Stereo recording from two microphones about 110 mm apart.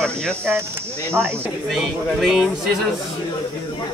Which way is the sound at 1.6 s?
Centre (ahead or behind).